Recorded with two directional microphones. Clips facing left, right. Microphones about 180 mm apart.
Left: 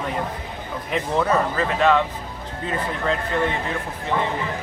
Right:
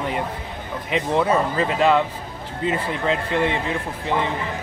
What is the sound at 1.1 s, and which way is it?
Speech, 20° right (ahead or behind).